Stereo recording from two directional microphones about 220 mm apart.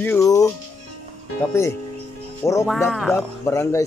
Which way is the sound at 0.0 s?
10° left (ahead or behind).